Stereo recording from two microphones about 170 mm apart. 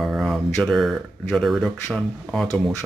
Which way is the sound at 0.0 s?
Centre (ahead or behind).